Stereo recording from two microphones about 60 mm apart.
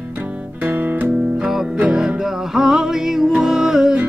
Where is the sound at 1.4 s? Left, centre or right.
Centre.